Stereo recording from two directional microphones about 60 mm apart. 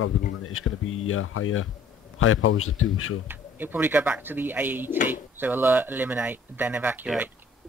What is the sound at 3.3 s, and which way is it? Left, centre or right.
Speech, right.